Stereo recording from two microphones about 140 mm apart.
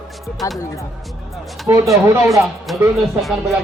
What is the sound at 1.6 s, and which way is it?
Speech, 20° right (ahead or behind).